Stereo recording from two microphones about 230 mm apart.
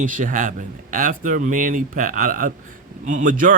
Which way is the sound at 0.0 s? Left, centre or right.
Right.